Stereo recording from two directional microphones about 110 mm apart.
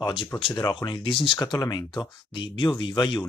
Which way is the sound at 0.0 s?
50° left (ahead or behind).